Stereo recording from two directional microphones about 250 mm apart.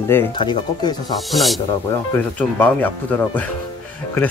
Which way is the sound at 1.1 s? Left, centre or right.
Centre.